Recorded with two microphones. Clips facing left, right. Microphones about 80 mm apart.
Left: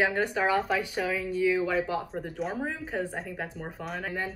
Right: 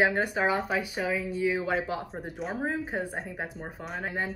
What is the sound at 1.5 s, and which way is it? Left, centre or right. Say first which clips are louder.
Speech: left 2 dB; right.